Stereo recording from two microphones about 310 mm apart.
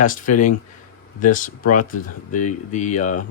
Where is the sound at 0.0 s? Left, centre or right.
Left.